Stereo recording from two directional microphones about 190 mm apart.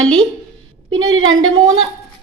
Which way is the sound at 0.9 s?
90° right.